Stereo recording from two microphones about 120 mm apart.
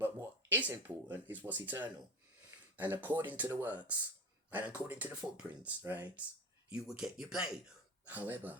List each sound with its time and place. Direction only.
0.0 s a sound: 15° right (ahead or behind)
1.1 s speech: 15° right (ahead or behind)
6.7 s speech: 5° right (ahead or behind)